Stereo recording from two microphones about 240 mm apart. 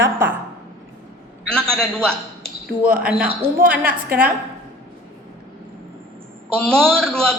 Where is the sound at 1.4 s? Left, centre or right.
Centre.